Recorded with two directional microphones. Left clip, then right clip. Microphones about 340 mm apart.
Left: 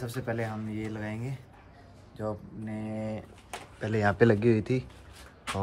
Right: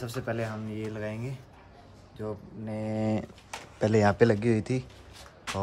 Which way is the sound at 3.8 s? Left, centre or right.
Centre.